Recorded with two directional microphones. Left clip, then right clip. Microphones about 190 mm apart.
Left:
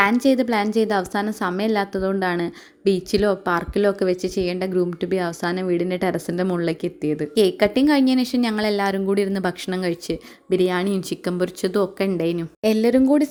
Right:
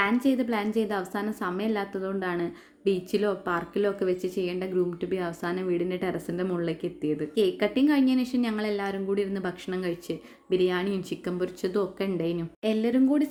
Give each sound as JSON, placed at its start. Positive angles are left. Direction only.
{"t": 0.0, "sound": "a woman's voice", "side_deg": 35}